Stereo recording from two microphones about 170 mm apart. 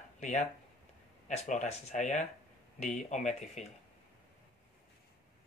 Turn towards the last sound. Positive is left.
turn(degrees=45)  # may be behind; listen again after turning